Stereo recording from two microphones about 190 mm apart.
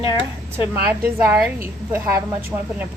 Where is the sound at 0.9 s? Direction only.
10° right (ahead or behind).